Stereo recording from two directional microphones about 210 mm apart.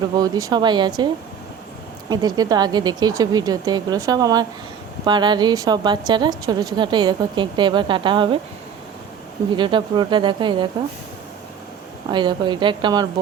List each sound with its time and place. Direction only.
0.2 s speech: 15° right (ahead or behind)
9.6 s speech: 20° right (ahead or behind)
12.1 s speech: 20° right (ahead or behind)